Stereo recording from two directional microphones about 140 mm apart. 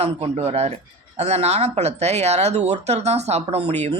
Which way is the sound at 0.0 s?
50° right (ahead or behind).